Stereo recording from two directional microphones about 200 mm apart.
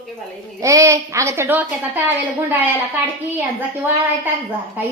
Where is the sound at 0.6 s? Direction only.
15° right (ahead or behind).